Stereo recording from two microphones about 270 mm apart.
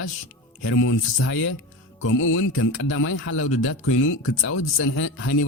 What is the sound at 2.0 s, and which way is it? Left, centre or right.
Speech, left.